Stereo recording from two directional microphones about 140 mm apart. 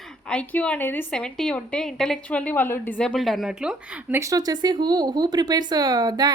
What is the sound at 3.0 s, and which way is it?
Speech, centre (ahead or behind).